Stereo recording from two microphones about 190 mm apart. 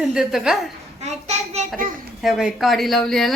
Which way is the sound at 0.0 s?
Centre (ahead or behind).